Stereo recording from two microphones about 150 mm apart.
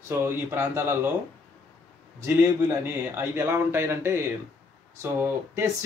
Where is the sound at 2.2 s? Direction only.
15° right (ahead or behind).